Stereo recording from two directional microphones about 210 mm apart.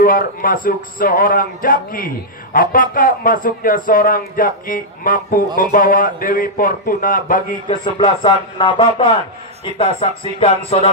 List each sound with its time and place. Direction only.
0.0 s speech: 45° left (ahead or behind)
7.6 s speech: 25° left (ahead or behind)